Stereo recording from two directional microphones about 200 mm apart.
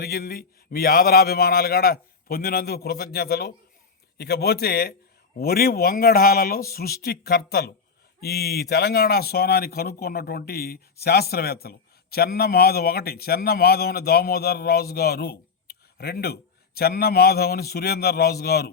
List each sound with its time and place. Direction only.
0.0 s speech: 50° left (ahead or behind)